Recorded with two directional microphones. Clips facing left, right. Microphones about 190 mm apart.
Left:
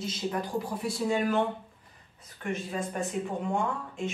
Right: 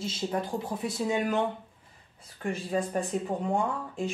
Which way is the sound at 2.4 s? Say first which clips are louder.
Right 3 dB; 35° right (ahead or behind).